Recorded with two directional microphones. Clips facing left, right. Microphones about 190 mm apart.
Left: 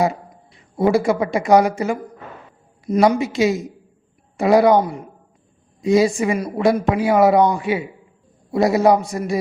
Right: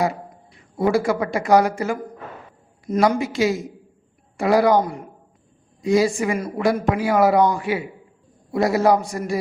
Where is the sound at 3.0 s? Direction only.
20° left (ahead or behind).